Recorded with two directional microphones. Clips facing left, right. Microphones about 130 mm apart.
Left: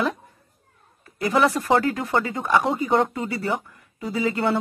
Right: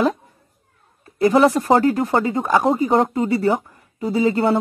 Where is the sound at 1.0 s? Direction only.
30° right (ahead or behind).